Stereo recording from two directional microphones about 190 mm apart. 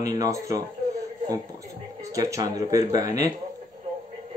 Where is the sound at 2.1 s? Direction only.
20° right (ahead or behind).